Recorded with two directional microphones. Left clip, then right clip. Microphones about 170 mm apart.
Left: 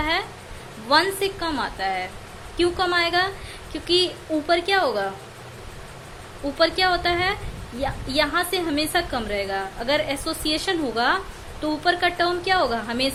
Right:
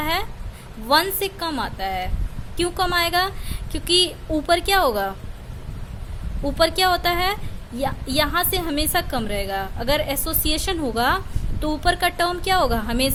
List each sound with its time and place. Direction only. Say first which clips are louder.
0.0 s a sound: even; 35° right (ahead or behind)
0.9 s a woman's voice: even; 35° right (ahead or behind)
6.6 s a woman's voice: right 1 dB; 35° right (ahead or behind)